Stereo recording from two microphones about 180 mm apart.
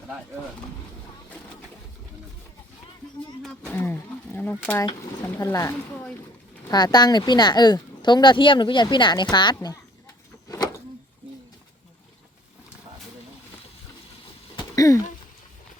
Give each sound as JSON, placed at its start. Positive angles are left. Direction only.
{"t": 3.7, "sound": "roaring cats", "side_deg": 10}
{"t": 4.4, "sound": "speech", "side_deg": 10}
{"t": 10.5, "sound": "a sound", "side_deg": 20}
{"t": 14.5, "sound": "throat clearing", "side_deg": 20}